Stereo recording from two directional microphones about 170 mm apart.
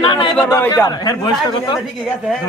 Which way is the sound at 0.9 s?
25° left (ahead or behind).